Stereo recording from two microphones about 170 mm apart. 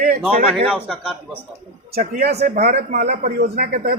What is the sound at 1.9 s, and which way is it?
A man's voice, 60° right (ahead or behind).